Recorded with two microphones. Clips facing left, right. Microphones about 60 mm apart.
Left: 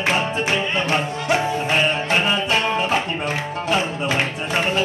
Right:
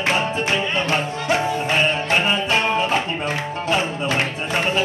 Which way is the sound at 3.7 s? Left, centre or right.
Centre.